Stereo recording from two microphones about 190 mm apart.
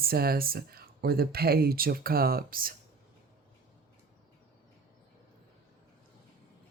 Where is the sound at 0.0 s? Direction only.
55° right (ahead or behind).